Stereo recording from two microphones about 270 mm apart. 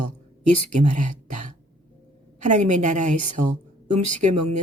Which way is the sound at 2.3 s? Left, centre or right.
Right.